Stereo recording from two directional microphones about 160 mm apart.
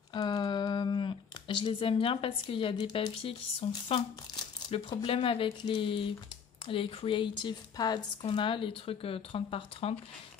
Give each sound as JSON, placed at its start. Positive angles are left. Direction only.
{"t": 0.1, "sound": "speech", "side_deg": 25}